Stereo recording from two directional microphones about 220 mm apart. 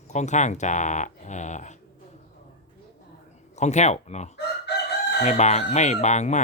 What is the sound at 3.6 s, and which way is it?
Speech, 30° left (ahead or behind).